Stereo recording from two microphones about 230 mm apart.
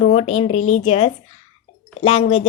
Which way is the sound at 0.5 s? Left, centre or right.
Left.